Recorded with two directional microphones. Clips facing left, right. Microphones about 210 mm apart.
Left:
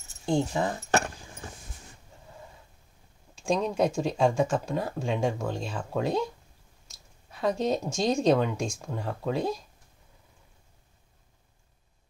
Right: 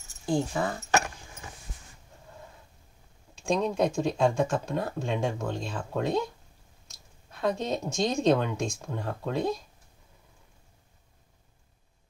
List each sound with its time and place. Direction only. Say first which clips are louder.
0.2 s speech: left 1 dB; 20° left (ahead or behind)
3.4 s speech: even; 10° left (ahead or behind)
7.2 s speech: left 2 dB; 10° left (ahead or behind)